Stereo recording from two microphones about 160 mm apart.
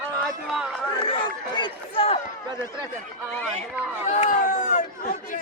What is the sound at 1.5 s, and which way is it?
Speech, 30° left (ahead or behind).